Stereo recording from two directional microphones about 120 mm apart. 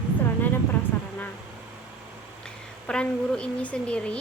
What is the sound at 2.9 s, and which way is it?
A woman's voice, 10° left (ahead or behind).